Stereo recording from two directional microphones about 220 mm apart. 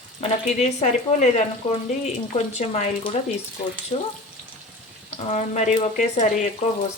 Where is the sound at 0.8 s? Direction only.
30° left (ahead or behind).